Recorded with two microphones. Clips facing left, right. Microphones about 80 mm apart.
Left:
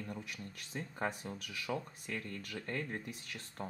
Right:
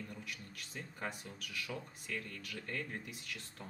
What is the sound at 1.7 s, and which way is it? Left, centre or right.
Speech, left.